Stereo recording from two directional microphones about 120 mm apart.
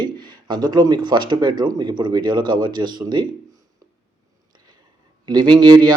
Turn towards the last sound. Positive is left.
turn(degrees=-40)  # may be behind; listen again after turning